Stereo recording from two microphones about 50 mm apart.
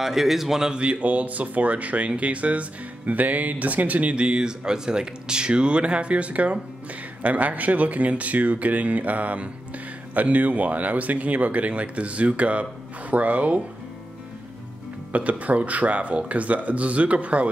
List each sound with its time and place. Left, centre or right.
0.0 s speech: centre
0.7 s speech: right
15.1 s speech: right